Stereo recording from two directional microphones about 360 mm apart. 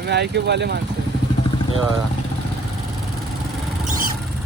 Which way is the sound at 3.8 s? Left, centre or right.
Right.